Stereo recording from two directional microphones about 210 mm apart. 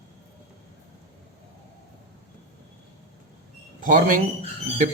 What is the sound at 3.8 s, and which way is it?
Speech, 40° right (ahead or behind).